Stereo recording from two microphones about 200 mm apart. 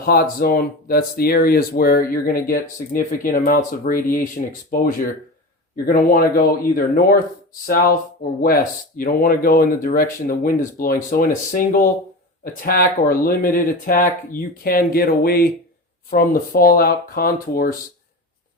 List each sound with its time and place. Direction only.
0.0 s speech: 50° left (ahead or behind)